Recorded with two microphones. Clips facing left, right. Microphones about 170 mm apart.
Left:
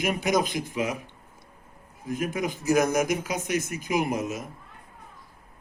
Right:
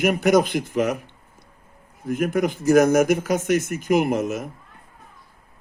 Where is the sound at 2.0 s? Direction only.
60° right (ahead or behind).